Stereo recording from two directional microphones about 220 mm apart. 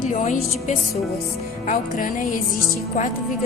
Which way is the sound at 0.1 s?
35° left (ahead or behind).